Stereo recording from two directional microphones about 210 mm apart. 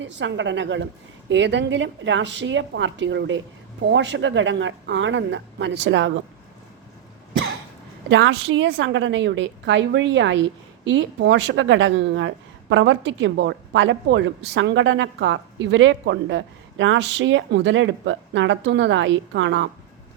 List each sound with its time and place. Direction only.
0.0 s a woman's voice: 60° right (ahead or behind)
8.1 s a woman's voice: 55° right (ahead or behind)